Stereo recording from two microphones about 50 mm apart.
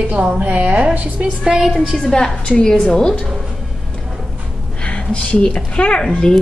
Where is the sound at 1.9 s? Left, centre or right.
Centre.